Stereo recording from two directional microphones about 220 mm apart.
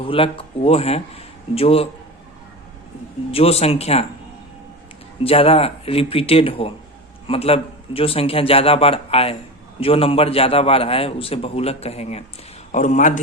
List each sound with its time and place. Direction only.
0.0 s a man's voice: 25° left (ahead or behind)
3.3 s a man's voice: 25° left (ahead or behind)
5.2 s a man's voice: 25° left (ahead or behind)